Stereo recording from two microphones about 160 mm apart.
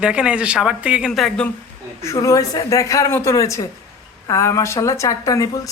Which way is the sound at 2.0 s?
20° left (ahead or behind).